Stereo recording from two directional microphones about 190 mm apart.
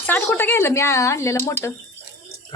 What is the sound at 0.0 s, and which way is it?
Speech, 10° left (ahead or behind).